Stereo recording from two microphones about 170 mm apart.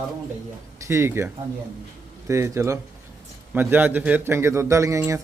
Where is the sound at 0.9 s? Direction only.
15° right (ahead or behind).